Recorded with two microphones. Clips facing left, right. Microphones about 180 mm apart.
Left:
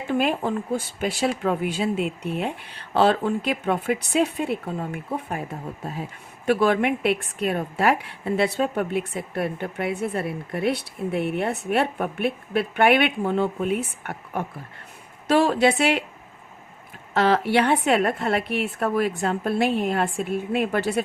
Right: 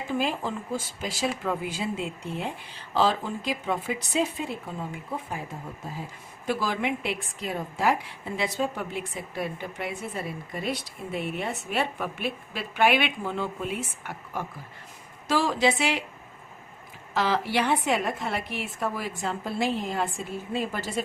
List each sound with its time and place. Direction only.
0.1 s a woman's voice: 60° left (ahead or behind)
17.2 s a woman's voice: 60° left (ahead or behind)